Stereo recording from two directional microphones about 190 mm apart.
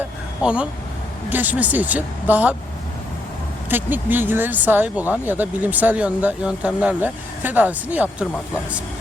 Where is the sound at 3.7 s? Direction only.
10° right (ahead or behind).